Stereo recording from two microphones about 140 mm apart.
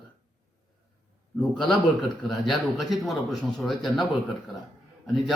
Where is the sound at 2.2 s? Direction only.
Centre (ahead or behind).